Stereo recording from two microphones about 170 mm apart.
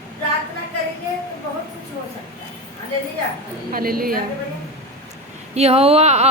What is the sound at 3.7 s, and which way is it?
Speech, 60° right (ahead or behind).